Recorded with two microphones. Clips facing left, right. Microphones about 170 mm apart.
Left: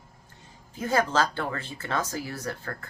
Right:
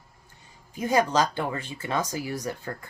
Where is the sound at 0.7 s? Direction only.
15° right (ahead or behind).